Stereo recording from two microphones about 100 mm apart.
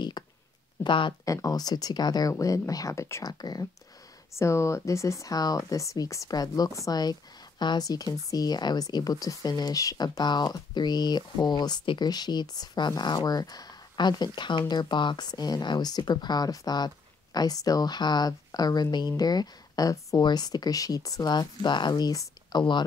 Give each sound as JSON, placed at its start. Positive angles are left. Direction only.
{"t": 0.2, "sound": "a sound", "side_deg": 40}
{"t": 0.8, "sound": "speech", "side_deg": 55}
{"t": 1.2, "sound": "speech", "side_deg": 35}
{"t": 2.3, "sound": "speech", "side_deg": 30}
{"t": 3.3, "sound": "speech", "side_deg": 45}
{"t": 4.3, "sound": "speech", "side_deg": 30}